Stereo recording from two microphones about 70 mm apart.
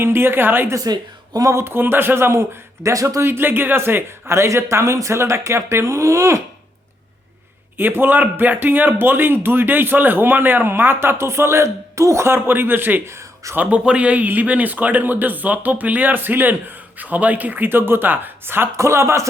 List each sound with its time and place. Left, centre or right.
0.0 s speech: right
0.9 s speech: right
1.5 s speech: right
3.2 s speech: right
7.8 s speech: right
13.6 s speech: centre
18.8 s speech: right